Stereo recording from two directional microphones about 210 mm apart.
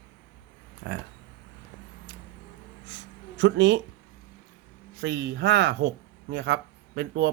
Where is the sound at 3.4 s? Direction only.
60° right (ahead or behind).